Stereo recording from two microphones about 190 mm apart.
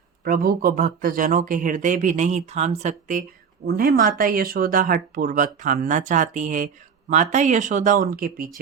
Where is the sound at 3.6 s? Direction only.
55° right (ahead or behind).